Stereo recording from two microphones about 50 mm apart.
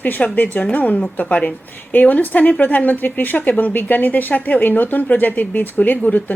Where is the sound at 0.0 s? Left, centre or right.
Left.